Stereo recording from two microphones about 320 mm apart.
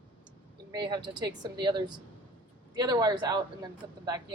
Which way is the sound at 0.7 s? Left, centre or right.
Centre.